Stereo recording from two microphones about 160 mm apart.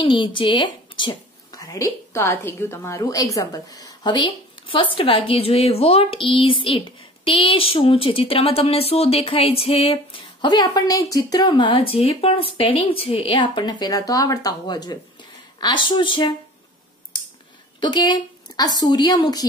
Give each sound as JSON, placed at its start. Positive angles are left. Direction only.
{"t": 0.0, "sound": "speech", "side_deg": 30}
{"t": 17.7, "sound": "a woman's voice", "side_deg": 25}